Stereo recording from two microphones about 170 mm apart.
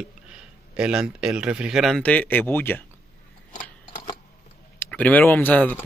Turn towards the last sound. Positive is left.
turn(degrees=10)  # may be behind; listen again after turning